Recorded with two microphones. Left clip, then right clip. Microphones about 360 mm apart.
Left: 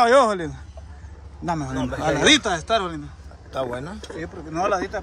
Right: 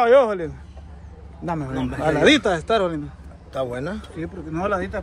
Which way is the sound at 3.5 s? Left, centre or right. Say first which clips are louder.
Right 1 dB; centre.